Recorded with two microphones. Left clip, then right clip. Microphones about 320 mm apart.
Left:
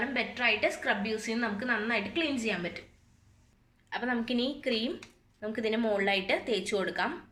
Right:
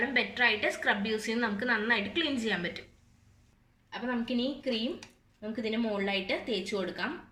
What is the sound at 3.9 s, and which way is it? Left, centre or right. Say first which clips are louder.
A woman's voice: left 2 dB; left.